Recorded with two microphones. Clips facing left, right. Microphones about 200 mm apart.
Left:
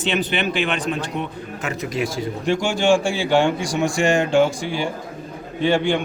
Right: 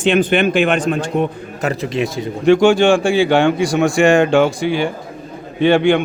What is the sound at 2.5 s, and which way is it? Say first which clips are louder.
A man's voice: right 8 dB; 65° right (ahead or behind).